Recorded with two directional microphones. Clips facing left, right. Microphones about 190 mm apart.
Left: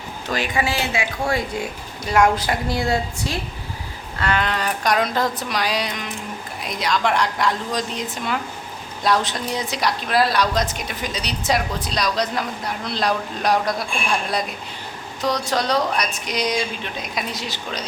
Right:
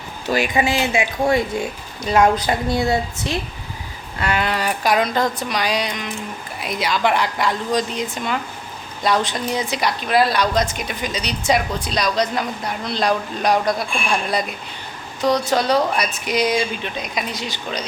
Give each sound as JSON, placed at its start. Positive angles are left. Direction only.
{"t": 0.5, "sound": "a woman's voice", "side_deg": -20}
{"t": 4.2, "sound": "a woman's voice", "side_deg": -10}